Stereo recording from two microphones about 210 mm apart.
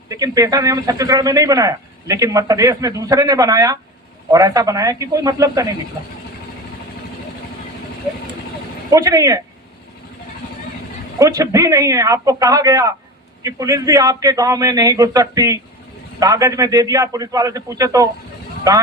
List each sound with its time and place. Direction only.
0.1 s speech: 15° right (ahead or behind)
8.9 s speech: 15° right (ahead or behind)
11.2 s speech: 15° right (ahead or behind)